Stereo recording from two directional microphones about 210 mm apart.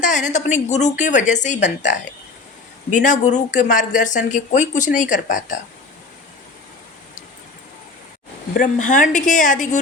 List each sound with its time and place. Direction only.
0.0 s speech: 35° left (ahead or behind)
8.5 s speech: 35° left (ahead or behind)